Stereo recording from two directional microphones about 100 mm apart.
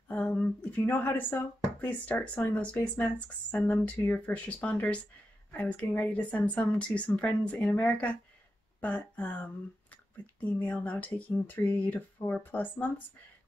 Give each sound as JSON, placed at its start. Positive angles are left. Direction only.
{"t": 0.1, "sound": "speech", "side_deg": 15}